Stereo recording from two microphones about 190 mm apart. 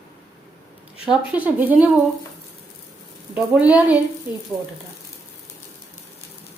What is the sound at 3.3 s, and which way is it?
Speech, 5° right (ahead or behind).